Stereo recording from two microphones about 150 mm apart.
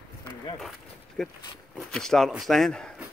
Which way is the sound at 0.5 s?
Centre (ahead or behind).